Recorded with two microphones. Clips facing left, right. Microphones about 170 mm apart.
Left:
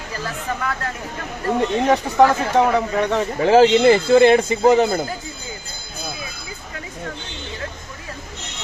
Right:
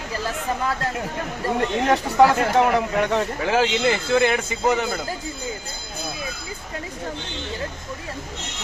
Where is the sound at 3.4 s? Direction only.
35° left (ahead or behind).